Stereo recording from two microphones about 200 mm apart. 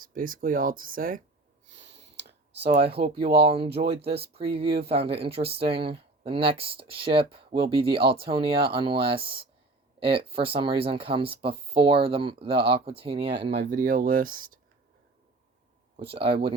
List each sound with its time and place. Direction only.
0.0 s speech: 45° right (ahead or behind)
1.6 s a sound: 35° right (ahead or behind)
1.9 s clicking: 60° right (ahead or behind)
2.7 s speech: 25° right (ahead or behind)
13.7 s speech: 40° right (ahead or behind)
16.1 s speech: 25° right (ahead or behind)